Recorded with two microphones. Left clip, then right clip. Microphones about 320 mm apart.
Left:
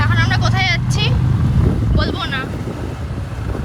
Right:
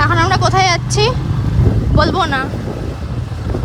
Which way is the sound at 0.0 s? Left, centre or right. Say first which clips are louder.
Right 6 dB; right.